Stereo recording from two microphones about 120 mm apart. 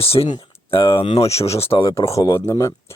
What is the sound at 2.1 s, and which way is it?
Speech, 25° left (ahead or behind).